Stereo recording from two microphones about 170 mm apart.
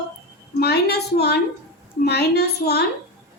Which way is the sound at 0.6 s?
70° left (ahead or behind).